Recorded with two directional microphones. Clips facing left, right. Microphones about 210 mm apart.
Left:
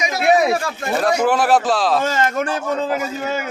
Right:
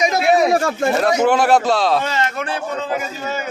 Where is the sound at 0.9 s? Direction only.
Centre (ahead or behind).